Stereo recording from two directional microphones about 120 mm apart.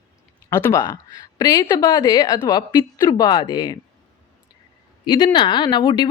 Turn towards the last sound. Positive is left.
turn(degrees=40)  # may be behind; listen again after turning